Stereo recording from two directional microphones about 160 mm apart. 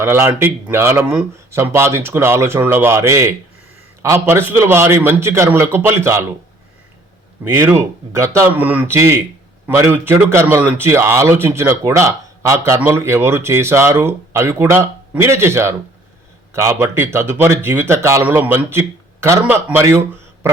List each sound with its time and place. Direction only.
0.0 s a man's voice: 15° right (ahead or behind)
7.4 s a man's voice: 15° right (ahead or behind)